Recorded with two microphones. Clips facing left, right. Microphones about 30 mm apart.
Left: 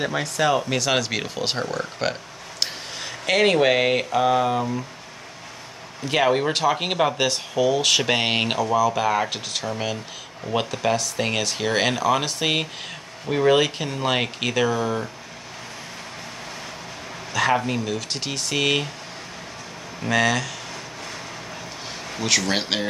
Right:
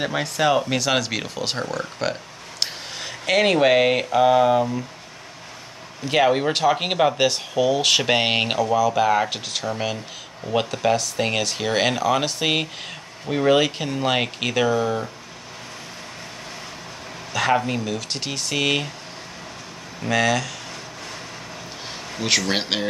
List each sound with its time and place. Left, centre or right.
0.0 s speech: centre
6.0 s speech: centre
17.3 s speech: centre
20.0 s speech: centre
22.5 s speech: centre